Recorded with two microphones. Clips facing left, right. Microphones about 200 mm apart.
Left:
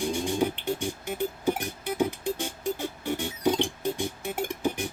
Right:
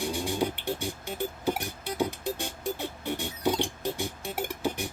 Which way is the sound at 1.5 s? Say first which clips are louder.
Left 2 dB; 15° left (ahead or behind).